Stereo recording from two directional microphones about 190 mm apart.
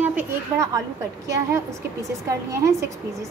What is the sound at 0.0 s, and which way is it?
A woman's voice, 10° right (ahead or behind).